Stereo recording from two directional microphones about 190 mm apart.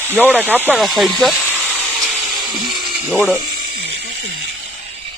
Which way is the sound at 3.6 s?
60° right (ahead or behind).